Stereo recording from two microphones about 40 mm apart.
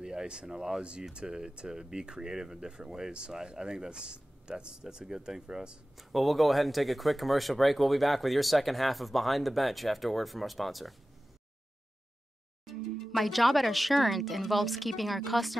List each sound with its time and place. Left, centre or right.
0.0 s speech: centre
5.9 s speech: centre
12.6 s speech: centre